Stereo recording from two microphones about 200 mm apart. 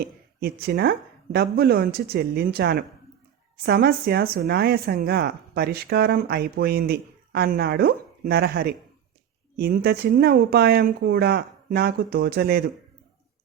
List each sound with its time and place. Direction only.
0.0 s speech: 50° right (ahead or behind)